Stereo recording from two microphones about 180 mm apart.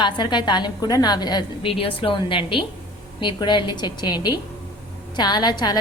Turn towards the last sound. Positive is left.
turn(degrees=25)  # may be behind; listen again after turning